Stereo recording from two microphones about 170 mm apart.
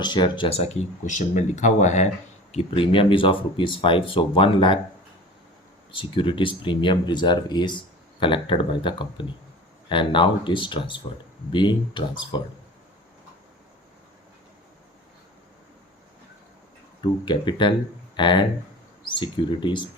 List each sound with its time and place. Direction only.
0.0 s speech: 25° left (ahead or behind); by 2.0 s 45° left (ahead or behind)
2.5 s speech: 35° left (ahead or behind)
5.9 s speech: 30° left (ahead or behind)
17.0 s speech: 25° left (ahead or behind)